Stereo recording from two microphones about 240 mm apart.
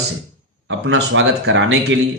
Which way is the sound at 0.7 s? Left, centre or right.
Right.